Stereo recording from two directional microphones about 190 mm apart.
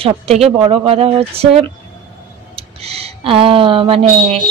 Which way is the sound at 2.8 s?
30° right (ahead or behind).